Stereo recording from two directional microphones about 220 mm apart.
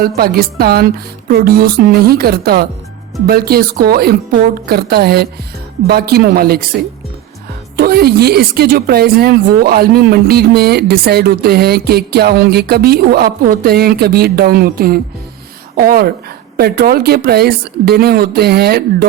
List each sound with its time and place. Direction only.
0.2 s speech: 45° right (ahead or behind)
7.8 s a woman's voice: 45° right (ahead or behind)